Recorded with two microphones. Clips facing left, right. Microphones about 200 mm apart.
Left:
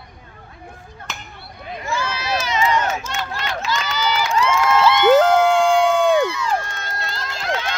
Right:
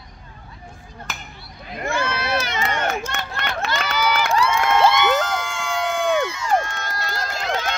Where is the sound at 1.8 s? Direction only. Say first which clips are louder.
Right 2 dB; 60° right (ahead or behind).